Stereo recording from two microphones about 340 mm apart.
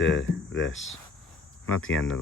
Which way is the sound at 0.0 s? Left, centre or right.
Left.